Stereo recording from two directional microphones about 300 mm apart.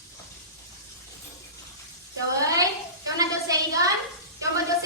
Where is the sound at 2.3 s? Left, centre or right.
Centre.